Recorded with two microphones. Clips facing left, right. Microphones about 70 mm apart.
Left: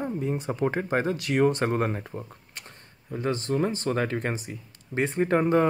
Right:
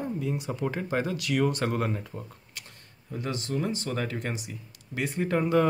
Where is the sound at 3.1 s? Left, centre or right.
Left.